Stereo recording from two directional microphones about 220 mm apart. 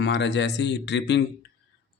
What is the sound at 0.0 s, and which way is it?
A man's voice, 55° left (ahead or behind).